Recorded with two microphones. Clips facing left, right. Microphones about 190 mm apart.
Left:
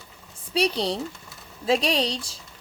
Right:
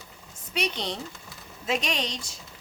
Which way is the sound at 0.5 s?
35° left (ahead or behind).